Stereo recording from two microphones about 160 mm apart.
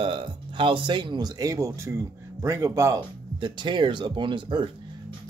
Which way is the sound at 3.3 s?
30° right (ahead or behind).